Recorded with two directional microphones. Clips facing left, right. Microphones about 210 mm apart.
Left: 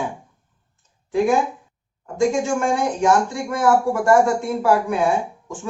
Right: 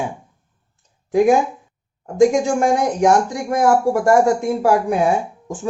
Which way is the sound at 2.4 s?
40° right (ahead or behind).